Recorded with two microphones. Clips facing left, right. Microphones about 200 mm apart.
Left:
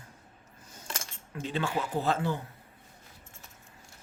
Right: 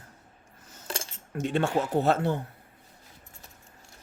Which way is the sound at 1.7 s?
45° right (ahead or behind).